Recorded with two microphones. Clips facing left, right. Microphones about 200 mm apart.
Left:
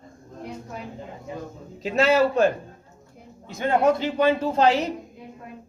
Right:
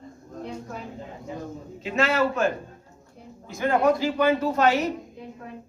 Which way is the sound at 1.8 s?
35° left (ahead or behind).